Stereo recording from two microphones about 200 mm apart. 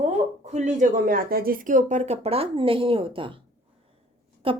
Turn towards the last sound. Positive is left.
turn(degrees=-25)  # may be behind; listen again after turning